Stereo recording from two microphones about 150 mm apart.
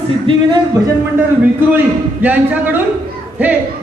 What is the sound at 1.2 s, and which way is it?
A man's voice, 10° right (ahead or behind).